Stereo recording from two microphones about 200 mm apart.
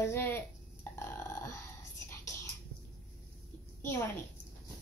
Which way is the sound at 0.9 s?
15° left (ahead or behind).